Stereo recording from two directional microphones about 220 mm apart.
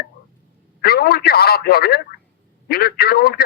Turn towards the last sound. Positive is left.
turn(degrees=45)  # may be behind; listen again after turning